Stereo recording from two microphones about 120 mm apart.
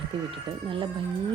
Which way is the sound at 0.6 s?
45° right (ahead or behind).